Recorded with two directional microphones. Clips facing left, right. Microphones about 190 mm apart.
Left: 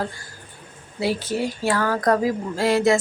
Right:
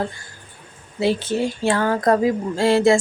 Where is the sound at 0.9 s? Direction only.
25° right (ahead or behind).